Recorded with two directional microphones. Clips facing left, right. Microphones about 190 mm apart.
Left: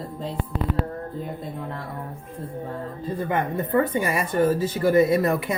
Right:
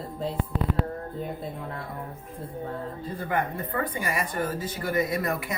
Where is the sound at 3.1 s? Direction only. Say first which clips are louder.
Left 4 dB; 25° left (ahead or behind).